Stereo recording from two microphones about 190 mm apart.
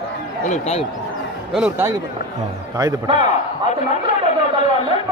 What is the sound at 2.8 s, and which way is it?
Speech, 20° right (ahead or behind).